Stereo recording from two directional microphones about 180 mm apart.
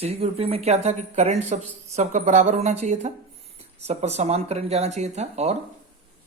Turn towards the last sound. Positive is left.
turn(degrees=-35)  # may be behind; listen again after turning